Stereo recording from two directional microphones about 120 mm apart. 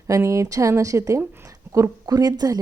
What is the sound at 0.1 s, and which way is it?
Speech, 25° right (ahead or behind).